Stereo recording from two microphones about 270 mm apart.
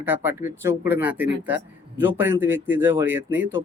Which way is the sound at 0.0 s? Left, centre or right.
Centre.